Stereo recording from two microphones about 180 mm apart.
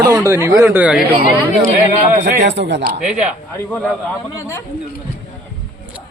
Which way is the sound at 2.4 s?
75° right (ahead or behind).